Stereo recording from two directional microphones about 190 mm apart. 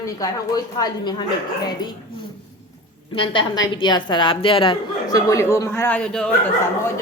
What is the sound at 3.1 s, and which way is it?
A woman's voice, 25° left (ahead or behind).